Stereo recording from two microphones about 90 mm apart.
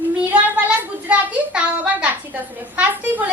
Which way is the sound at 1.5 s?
15° right (ahead or behind).